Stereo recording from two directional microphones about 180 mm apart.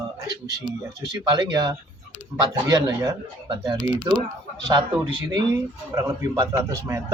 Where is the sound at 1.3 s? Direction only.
25° right (ahead or behind).